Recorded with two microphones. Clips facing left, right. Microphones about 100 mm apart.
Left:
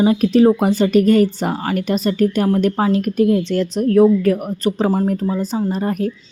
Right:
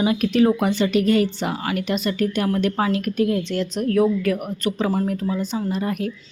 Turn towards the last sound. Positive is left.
turn(degrees=40)  # may be behind; listen again after turning